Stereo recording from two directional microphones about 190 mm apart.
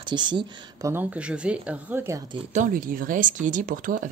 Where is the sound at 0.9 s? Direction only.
5° right (ahead or behind).